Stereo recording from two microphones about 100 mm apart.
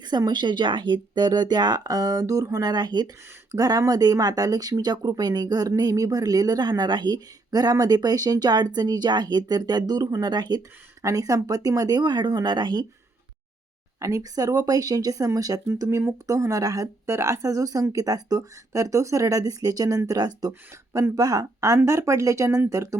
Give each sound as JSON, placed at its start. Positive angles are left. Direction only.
{"t": 0.0, "sound": "speech", "side_deg": -45}
{"t": 14.0, "sound": "speech", "side_deg": -35}
{"t": 20.5, "sound": "speech", "side_deg": -30}